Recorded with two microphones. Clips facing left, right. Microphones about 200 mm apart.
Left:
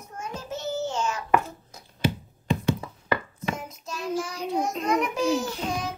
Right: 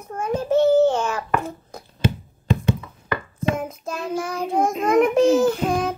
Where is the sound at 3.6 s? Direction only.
55° right (ahead or behind).